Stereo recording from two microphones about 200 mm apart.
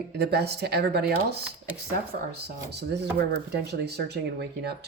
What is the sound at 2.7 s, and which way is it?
Speech, 55° right (ahead or behind).